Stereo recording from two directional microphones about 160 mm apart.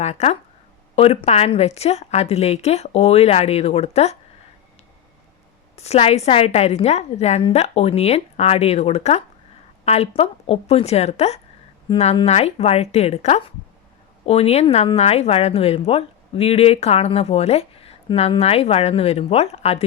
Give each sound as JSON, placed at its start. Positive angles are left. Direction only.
{"t": 0.0, "sound": "speech", "side_deg": 40}
{"t": 5.7, "sound": "speech", "side_deg": 40}